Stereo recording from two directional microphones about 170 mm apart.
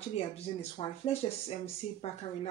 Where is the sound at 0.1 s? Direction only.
35° left (ahead or behind).